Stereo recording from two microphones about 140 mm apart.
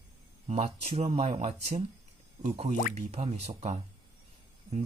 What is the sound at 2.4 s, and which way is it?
Speech, 55° right (ahead or behind).